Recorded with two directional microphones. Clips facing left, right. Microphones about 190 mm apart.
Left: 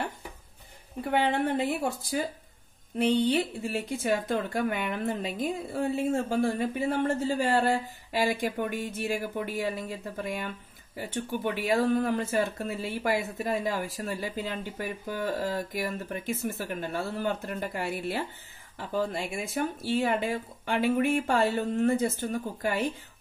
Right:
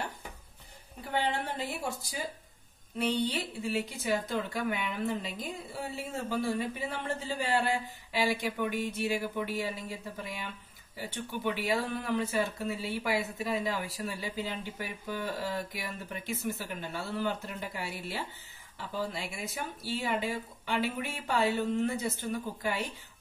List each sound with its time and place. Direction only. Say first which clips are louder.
1.1 s speech: left 6 dB; 55° left (ahead or behind)